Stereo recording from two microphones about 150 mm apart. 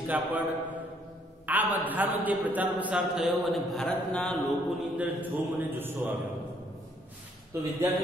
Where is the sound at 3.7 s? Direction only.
5° left (ahead or behind).